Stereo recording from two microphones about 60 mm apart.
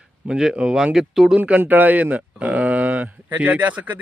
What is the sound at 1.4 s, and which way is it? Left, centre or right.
A man's voice, right.